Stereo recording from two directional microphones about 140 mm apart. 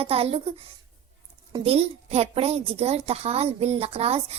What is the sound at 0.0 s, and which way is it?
Speech, 45° right (ahead or behind).